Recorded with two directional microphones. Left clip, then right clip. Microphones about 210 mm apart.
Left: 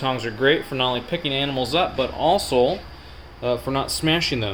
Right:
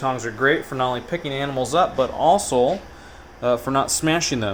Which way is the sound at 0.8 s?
Centre (ahead or behind).